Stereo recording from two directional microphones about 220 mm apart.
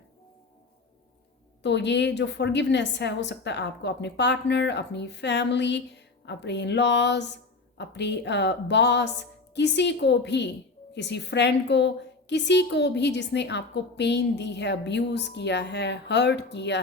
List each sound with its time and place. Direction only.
1.6 s a woman's voice: 50° left (ahead or behind)